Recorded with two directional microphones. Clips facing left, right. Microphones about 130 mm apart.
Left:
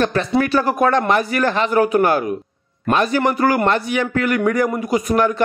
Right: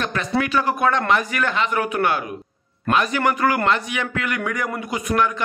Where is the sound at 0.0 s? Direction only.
35° left (ahead or behind).